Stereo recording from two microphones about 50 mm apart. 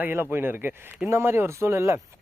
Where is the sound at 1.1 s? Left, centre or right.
Right.